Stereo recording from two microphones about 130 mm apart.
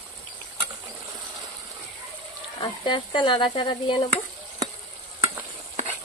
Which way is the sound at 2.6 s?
35° left (ahead or behind).